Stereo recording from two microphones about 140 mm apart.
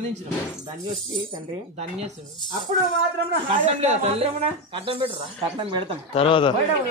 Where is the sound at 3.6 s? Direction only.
50° right (ahead or behind).